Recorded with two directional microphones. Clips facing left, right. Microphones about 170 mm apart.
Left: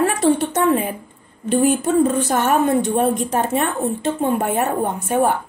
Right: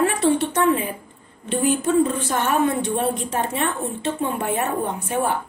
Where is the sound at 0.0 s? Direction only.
40° left (ahead or behind).